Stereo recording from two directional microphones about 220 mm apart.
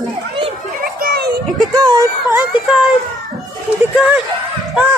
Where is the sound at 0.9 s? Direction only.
45° right (ahead or behind).